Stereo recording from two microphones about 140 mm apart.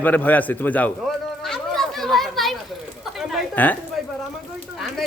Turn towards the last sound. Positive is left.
turn(degrees=0)  # may be behind; listen again after turning